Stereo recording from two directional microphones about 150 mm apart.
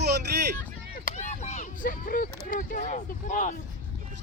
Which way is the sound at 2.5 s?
60° left (ahead or behind).